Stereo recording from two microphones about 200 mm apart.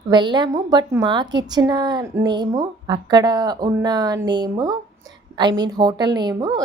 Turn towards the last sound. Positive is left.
turn(degrees=-20)  # may be behind; listen again after turning